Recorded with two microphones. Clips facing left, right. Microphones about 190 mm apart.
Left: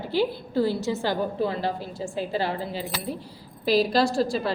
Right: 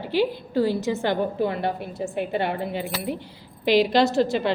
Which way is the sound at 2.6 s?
60° right (ahead or behind).